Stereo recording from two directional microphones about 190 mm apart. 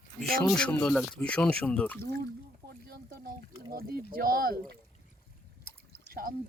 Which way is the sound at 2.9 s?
50° right (ahead or behind).